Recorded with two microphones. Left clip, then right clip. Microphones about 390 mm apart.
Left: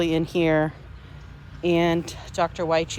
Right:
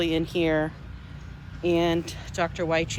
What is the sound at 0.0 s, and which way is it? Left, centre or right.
Speech, centre.